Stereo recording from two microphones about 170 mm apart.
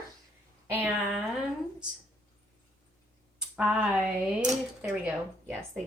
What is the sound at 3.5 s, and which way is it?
Speech, 5° right (ahead or behind).